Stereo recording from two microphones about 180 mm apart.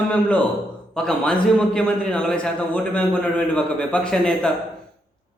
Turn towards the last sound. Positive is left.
turn(degrees=5)  # may be behind; listen again after turning